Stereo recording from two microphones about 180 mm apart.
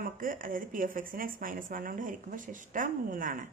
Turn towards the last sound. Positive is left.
turn(degrees=-50)  # may be behind; listen again after turning